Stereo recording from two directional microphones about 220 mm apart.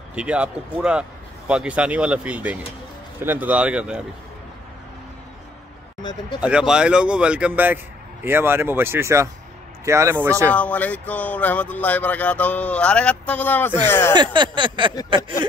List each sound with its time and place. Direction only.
0.1 s a man's voice: 5° right (ahead or behind)
6.4 s a man's voice: 5° right (ahead or behind)
10.5 s speech: 5° left (ahead or behind)
14.1 s a sound: 20° right (ahead or behind)